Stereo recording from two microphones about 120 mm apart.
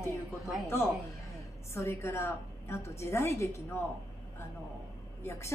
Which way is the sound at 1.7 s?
20° left (ahead or behind).